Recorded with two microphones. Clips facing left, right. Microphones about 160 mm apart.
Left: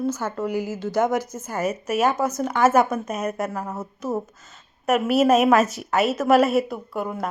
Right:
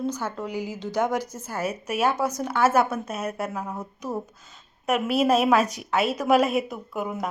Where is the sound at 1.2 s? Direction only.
10° right (ahead or behind).